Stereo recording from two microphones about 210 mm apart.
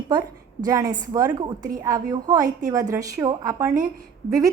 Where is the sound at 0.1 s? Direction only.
20° right (ahead or behind).